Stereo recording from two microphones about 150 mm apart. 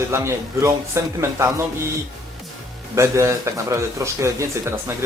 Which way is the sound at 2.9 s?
20° right (ahead or behind).